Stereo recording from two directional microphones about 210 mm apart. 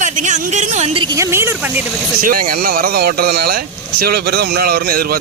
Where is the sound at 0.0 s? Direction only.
35° right (ahead or behind).